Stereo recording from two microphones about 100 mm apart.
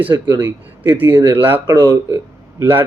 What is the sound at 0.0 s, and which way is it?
A man's voice, 20° right (ahead or behind).